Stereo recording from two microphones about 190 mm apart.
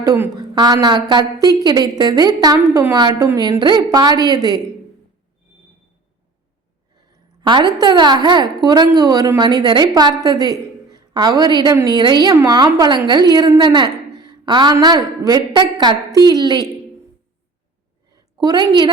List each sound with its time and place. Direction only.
0.0 s a woman's voice: 20° right (ahead or behind)
7.4 s a woman's voice: 25° right (ahead or behind)
18.1 s a sound: 20° right (ahead or behind)